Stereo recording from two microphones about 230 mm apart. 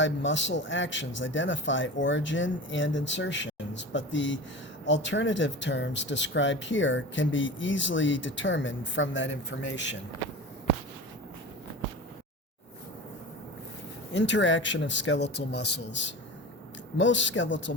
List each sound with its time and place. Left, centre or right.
0.0 s speech: left
14.1 s speech: left